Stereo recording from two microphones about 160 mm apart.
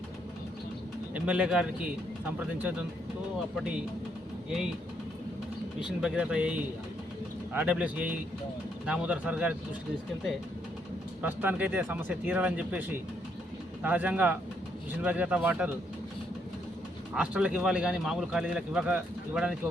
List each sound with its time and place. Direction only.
1.1 s speech: 5° right (ahead or behind)
3.5 s a man's voice: 5° right (ahead or behind)
6.0 s a man's voice: 5° right (ahead or behind)
11.2 s speech: 10° right (ahead or behind)
13.8 s speech: 10° right (ahead or behind)
17.2 s a man's voice: 5° right (ahead or behind)